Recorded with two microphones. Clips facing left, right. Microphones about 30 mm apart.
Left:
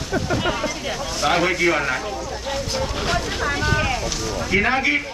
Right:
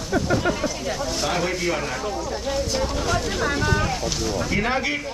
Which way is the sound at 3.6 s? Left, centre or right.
Left.